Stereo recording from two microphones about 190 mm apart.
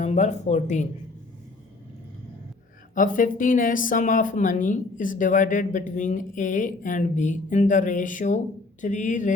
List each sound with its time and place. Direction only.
0.0 s speech: 40° left (ahead or behind)
2.9 s speech: 45° left (ahead or behind)